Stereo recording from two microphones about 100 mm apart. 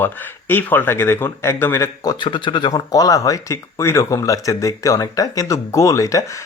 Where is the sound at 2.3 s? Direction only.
55° left (ahead or behind).